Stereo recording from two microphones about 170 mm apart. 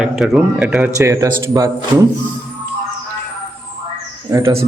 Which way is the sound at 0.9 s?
20° right (ahead or behind).